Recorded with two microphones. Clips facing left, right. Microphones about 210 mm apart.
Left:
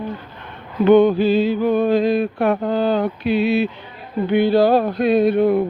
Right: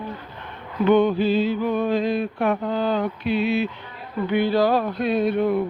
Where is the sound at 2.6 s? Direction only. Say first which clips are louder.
Left 4 dB; 35° left (ahead or behind).